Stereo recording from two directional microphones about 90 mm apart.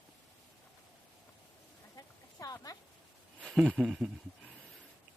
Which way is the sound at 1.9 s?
45° left (ahead or behind).